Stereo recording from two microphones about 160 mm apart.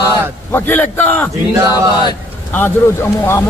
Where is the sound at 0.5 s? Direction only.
10° left (ahead or behind).